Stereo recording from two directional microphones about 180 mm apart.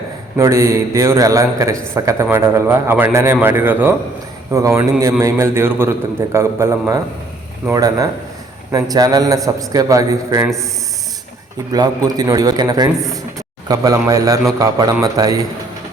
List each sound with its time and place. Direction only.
0.3 s a man's voice: 15° right (ahead or behind)
11.7 s a man's voice: 20° right (ahead or behind)